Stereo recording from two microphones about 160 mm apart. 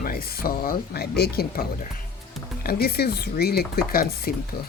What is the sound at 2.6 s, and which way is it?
Speech, 75° left (ahead or behind).